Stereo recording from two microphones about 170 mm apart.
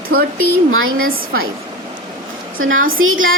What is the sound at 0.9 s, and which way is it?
Speech, 55° right (ahead or behind).